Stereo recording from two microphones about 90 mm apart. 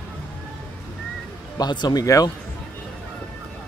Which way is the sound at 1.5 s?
50° left (ahead or behind).